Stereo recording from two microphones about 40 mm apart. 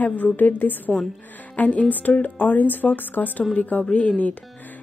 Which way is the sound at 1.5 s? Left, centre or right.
Left.